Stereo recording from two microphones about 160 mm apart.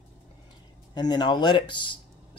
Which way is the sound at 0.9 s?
25° left (ahead or behind).